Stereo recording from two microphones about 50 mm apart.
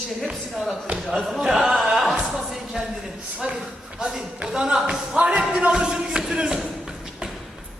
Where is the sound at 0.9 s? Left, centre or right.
Centre.